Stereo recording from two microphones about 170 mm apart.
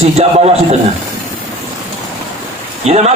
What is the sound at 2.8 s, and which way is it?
Speech, 40° right (ahead or behind).